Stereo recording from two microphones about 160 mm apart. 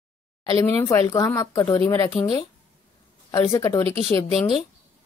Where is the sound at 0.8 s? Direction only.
20° left (ahead or behind).